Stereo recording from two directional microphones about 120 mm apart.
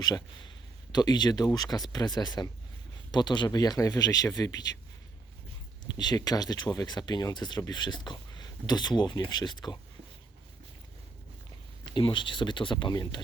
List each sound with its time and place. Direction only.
0.9 s speech: 35° left (ahead or behind)
6.0 s speech: 35° left (ahead or behind)
11.9 s speech: 40° left (ahead or behind)